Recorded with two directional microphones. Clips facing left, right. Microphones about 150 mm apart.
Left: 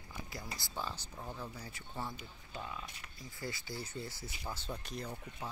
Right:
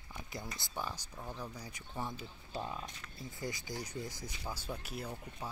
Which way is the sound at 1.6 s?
15° right (ahead or behind).